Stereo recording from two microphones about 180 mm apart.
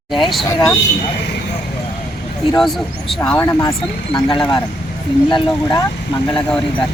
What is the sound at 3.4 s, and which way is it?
Speech, 20° left (ahead or behind).